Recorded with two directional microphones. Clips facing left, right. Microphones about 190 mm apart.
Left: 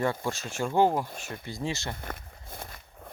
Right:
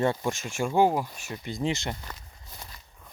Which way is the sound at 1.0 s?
50° left (ahead or behind).